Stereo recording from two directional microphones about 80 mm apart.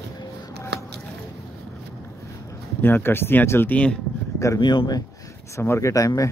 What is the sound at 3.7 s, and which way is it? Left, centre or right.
Speech, centre.